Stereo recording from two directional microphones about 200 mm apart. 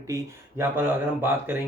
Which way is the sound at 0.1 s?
15° right (ahead or behind).